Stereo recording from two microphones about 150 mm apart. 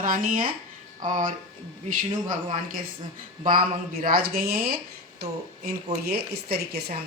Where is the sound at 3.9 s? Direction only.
75° right (ahead or behind).